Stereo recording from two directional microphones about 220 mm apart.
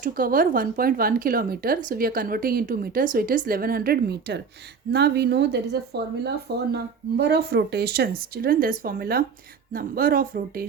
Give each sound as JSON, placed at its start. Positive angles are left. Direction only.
{"t": 0.0, "sound": "speech", "side_deg": -40}